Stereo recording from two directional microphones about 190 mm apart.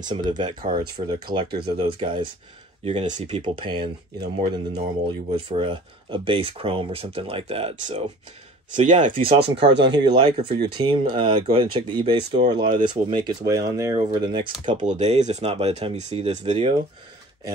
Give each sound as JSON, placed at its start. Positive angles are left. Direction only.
{"t": 0.0, "sound": "speech", "side_deg": -25}
{"t": 5.0, "sound": "speech", "side_deg": -25}
{"t": 8.8, "sound": "speech", "side_deg": -40}
{"t": 9.4, "sound": "speech", "side_deg": -65}
{"t": 9.8, "sound": "speech", "side_deg": -25}
{"t": 14.7, "sound": "speech", "side_deg": -40}